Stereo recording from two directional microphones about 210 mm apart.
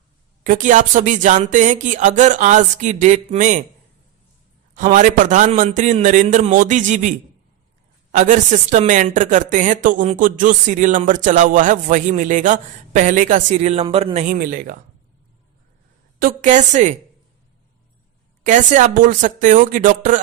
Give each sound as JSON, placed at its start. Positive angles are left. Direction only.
{"t": 0.4, "sound": "speech", "side_deg": -35}
{"t": 4.7, "sound": "speech", "side_deg": -40}
{"t": 16.1, "sound": "speech", "side_deg": -40}
{"t": 18.4, "sound": "speech", "side_deg": -35}